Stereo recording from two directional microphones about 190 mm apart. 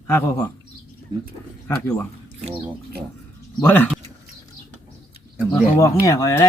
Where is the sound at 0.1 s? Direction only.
10° left (ahead or behind).